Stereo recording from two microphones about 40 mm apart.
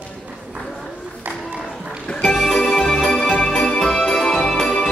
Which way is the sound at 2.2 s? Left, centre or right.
Centre.